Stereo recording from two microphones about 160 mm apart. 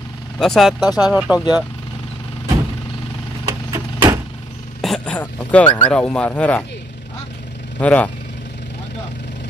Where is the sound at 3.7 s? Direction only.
20° right (ahead or behind).